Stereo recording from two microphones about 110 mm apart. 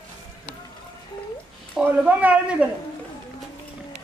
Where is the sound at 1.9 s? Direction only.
15° right (ahead or behind).